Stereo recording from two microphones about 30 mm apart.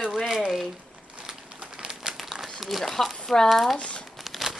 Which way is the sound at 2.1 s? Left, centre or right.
Centre.